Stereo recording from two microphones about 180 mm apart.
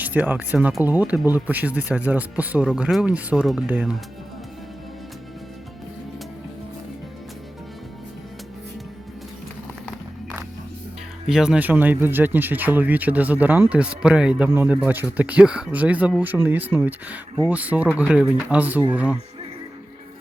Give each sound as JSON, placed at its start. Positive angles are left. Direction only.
{"t": 0.0, "sound": "speech", "side_deg": -10}
{"t": 11.3, "sound": "speech", "side_deg": -5}